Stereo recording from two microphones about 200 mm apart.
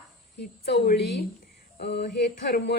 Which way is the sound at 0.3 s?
50° left (ahead or behind).